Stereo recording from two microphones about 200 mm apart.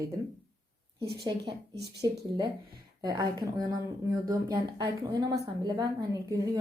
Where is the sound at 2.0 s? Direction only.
20° right (ahead or behind).